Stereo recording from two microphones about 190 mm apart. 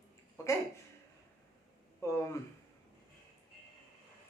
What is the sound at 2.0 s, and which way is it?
Speech, 15° left (ahead or behind).